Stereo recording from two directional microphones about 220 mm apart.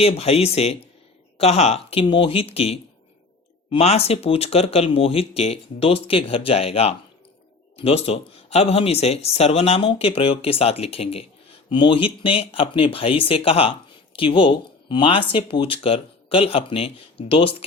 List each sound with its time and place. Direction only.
0.0 s speech: 25° left (ahead or behind)